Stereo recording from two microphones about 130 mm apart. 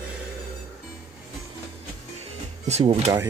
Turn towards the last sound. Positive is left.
turn(degrees=-50)  # may be behind; listen again after turning